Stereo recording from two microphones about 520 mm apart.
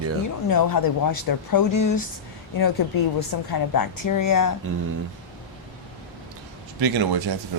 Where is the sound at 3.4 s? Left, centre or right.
Left.